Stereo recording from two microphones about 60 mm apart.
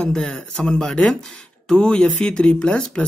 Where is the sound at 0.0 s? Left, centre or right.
Centre.